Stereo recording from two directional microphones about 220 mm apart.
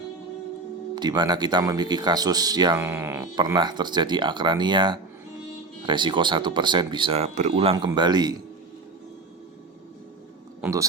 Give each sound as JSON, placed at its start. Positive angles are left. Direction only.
{"t": 0.9, "sound": "speech", "side_deg": -20}
{"t": 10.6, "sound": "speech", "side_deg": -15}